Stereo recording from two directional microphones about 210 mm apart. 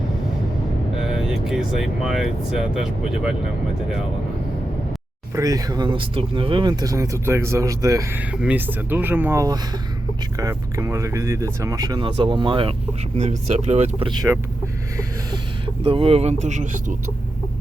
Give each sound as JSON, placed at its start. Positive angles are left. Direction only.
{"t": 1.0, "sound": "speech", "side_deg": 0}
{"t": 5.3, "sound": "speech", "side_deg": -15}
{"t": 15.6, "sound": "speech", "side_deg": -25}